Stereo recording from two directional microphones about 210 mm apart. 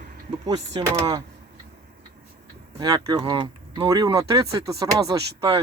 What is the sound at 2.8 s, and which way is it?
Speech, 20° right (ahead or behind).